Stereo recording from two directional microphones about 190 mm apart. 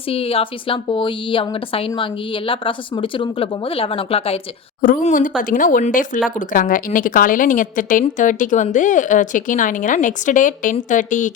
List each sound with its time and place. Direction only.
0.1 s speech: 30° left (ahead or behind)
4.8 s a woman's voice: 45° left (ahead or behind)